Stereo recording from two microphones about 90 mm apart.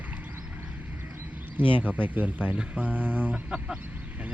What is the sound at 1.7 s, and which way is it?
Speech, 20° right (ahead or behind).